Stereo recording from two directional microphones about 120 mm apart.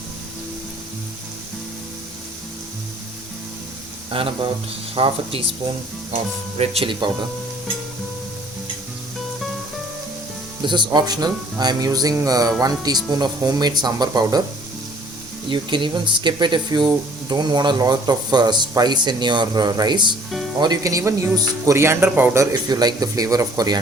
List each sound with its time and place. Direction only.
4.1 s speech: 50° right (ahead or behind)
6.6 s speech: 55° right (ahead or behind)
10.6 s speech: 40° right (ahead or behind)
15.4 s speech: 40° right (ahead or behind); by 22.4 s 15° right (ahead or behind)
22.7 s speech: 35° right (ahead or behind)